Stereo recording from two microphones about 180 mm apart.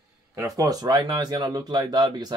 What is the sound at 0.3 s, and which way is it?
Speech, 20° right (ahead or behind).